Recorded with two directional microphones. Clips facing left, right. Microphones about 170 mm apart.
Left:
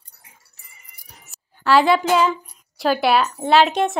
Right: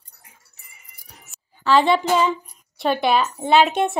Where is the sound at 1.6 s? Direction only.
5° left (ahead or behind).